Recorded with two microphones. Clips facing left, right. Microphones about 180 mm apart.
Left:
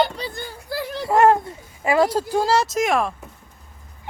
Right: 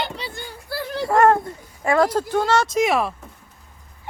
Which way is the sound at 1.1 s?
25° left (ahead or behind).